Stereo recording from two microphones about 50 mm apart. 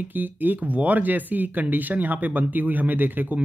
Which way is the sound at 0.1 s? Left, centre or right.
Right.